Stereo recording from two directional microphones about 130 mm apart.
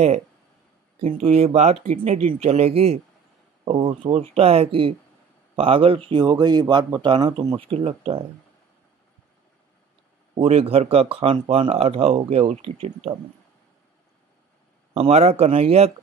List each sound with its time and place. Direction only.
1.2 s speech: 55° right (ahead or behind); by 7.3 s 35° right (ahead or behind)
7.5 s speech: 45° right (ahead or behind)
10.3 s speech: 50° right (ahead or behind)
15.0 s speech: 55° right (ahead or behind)